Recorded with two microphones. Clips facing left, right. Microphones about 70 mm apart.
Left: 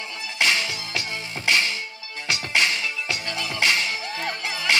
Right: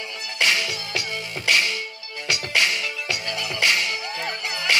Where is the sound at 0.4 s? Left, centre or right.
Left.